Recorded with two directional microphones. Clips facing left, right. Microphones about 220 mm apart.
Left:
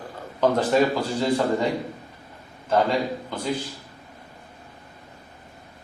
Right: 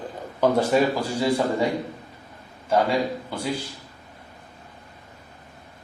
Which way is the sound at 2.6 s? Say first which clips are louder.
Even; 10° right (ahead or behind).